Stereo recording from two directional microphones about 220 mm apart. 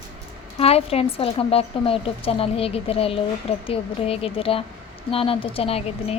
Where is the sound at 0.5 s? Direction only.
25° left (ahead or behind).